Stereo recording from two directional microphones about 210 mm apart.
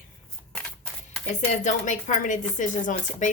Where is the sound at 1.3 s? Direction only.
35° left (ahead or behind).